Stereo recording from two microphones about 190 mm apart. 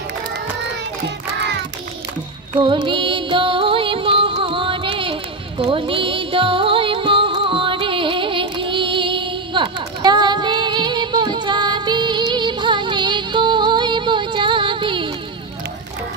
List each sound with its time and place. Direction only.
2.6 s music: 25° right (ahead or behind)